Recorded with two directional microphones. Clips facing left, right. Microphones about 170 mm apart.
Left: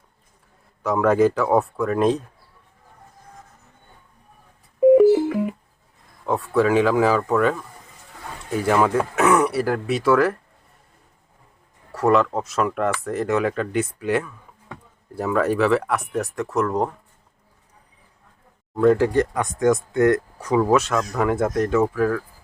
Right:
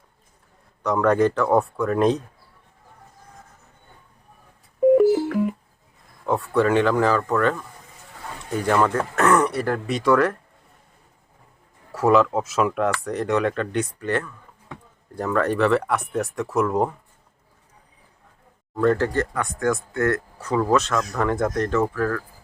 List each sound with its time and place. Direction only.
0.8 s speech: 5° left (ahead or behind)
4.9 s telephone dialing: 5° left (ahead or behind)
6.2 s speech: centre (ahead or behind)
11.9 s speech: centre (ahead or behind)
18.7 s speech: 5° left (ahead or behind)